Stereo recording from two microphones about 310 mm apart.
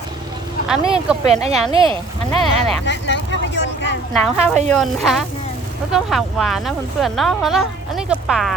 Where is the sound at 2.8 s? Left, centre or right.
Left.